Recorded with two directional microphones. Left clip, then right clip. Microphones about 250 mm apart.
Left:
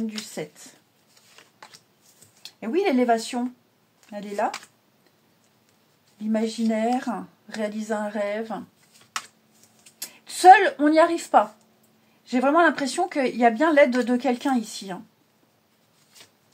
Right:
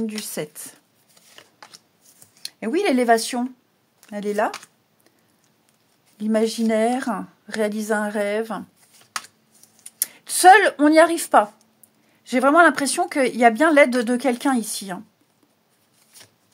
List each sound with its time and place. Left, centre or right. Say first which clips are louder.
0.0 s speech: right 4 dB; right
2.4 s a woman's voice: right 2 dB; right
6.1 s a woman's voice: right 6 dB; right
9.9 s speech: right 6 dB; right